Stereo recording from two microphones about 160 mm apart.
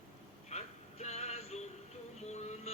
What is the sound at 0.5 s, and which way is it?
Male singing, 40° left (ahead or behind).